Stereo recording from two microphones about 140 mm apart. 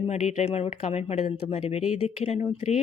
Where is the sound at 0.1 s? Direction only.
50° left (ahead or behind).